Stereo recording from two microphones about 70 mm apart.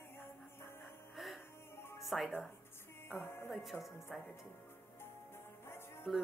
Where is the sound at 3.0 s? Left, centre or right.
Left.